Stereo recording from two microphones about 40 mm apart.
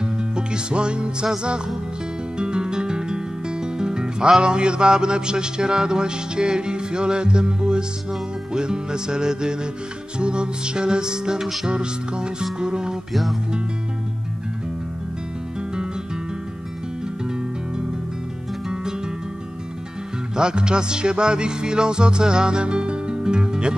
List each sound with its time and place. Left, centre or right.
0.0 s music: right
2.3 s music: right
13.1 s music: centre
20.3 s music: centre